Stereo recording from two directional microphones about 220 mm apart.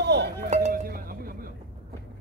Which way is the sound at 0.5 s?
35° right (ahead or behind).